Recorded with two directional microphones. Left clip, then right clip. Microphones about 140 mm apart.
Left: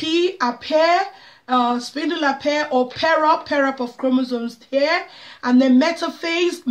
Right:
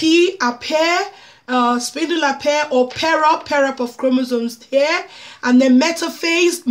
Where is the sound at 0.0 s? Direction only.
55° right (ahead or behind).